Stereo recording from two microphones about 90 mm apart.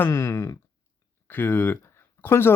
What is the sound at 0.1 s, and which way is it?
Speech, 35° left (ahead or behind).